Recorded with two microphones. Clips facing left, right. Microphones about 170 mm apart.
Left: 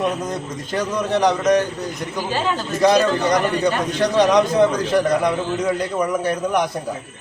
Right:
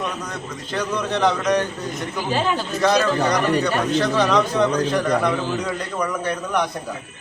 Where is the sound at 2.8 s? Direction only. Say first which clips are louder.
Left 3 dB; 15° left (ahead or behind).